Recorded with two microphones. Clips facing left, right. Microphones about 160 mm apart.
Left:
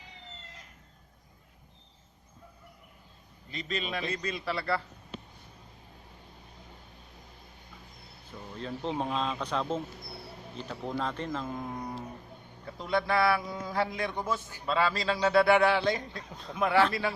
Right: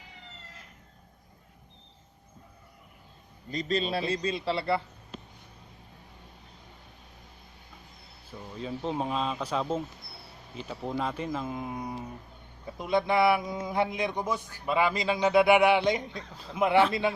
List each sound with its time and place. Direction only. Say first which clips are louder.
3.5 s a man's voice: right 6 dB; 35° right (ahead or behind)
8.5 s a man's voice: right 1 dB; 5° right (ahead or behind)
16.3 s speech: left 1 dB; 5° right (ahead or behind)
16.6 s a man's voice: right 3 dB; 20° right (ahead or behind)